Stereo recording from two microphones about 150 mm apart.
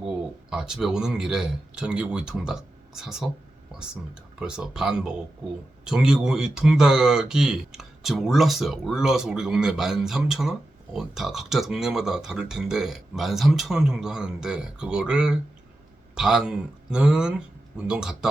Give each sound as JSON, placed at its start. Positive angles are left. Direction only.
{"t": 0.5, "sound": "speech", "side_deg": -5}